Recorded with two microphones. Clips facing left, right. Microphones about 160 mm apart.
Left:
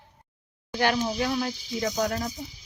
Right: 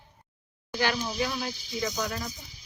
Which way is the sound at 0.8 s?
55° left (ahead or behind).